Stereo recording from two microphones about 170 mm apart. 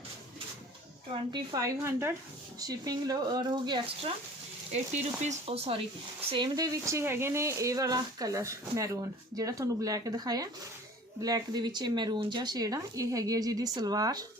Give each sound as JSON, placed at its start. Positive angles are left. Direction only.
{"t": 1.3, "sound": "speech", "side_deg": -25}
{"t": 4.7, "sound": "speech", "side_deg": -40}
{"t": 6.3, "sound": "speech", "side_deg": -25}